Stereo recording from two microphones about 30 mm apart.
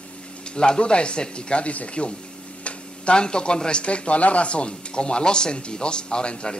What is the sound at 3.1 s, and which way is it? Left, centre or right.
Speech, left.